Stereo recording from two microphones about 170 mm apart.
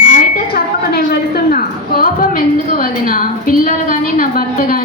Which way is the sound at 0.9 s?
65° left (ahead or behind).